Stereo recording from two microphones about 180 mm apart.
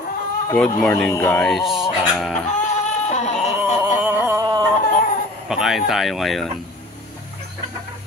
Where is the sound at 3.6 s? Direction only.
10° right (ahead or behind).